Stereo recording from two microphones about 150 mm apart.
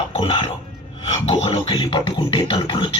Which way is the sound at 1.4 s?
35° left (ahead or behind).